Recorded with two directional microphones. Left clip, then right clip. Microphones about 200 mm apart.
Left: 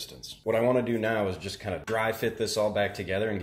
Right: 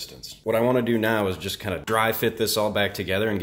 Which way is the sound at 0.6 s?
20° right (ahead or behind).